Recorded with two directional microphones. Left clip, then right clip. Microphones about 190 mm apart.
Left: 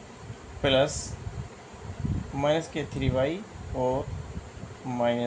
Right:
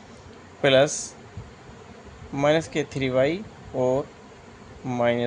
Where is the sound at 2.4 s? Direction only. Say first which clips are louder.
Right 5 dB; 65° right (ahead or behind).